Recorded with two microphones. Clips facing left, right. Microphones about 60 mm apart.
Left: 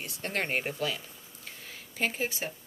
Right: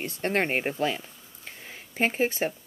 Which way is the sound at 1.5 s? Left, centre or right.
Right.